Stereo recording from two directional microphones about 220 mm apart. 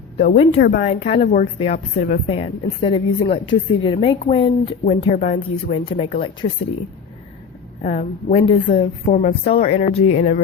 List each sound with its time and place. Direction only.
0.2 s speech: 30° left (ahead or behind)
0.6 s speech: 40° left (ahead or behind)
0.9 s speech: 25° left (ahead or behind)
2.2 s speech: 25° left (ahead or behind)
7.8 s speech: 35° left (ahead or behind)